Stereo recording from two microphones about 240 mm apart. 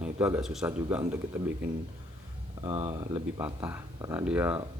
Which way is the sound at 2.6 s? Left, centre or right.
Right.